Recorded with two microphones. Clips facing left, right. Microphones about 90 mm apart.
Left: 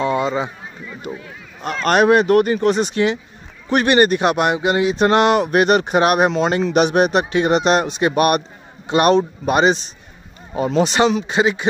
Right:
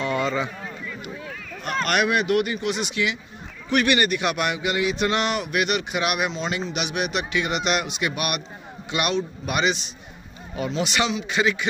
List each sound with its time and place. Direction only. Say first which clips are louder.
0.0 s run: left 5 dB; 25° left (ahead or behind)
1.9 s speech: left 9 dB; 35° left (ahead or behind)
11.2 s speech: left 5 dB; 30° left (ahead or behind)